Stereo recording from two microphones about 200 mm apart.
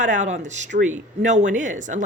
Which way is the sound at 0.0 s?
40° right (ahead or behind).